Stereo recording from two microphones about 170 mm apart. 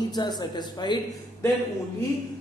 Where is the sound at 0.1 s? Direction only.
25° left (ahead or behind).